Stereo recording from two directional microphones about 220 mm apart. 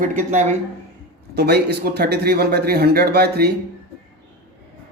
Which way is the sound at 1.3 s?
45° right (ahead or behind).